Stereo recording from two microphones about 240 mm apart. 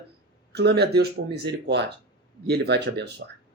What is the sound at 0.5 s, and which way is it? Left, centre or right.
Speech, right.